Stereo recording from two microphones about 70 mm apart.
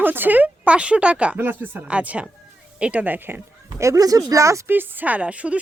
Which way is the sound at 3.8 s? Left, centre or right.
Right.